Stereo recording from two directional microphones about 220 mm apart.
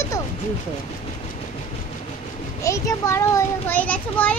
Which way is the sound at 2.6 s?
15° left (ahead or behind).